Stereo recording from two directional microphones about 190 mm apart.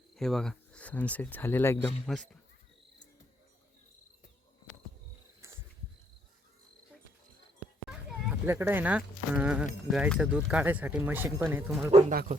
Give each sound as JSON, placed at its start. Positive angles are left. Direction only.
{"t": 0.2, "sound": "speech", "side_deg": 0}
{"t": 7.9, "sound": "a sound", "side_deg": -10}
{"t": 9.9, "sound": "speech", "side_deg": -5}
{"t": 11.9, "sound": "speech", "side_deg": -35}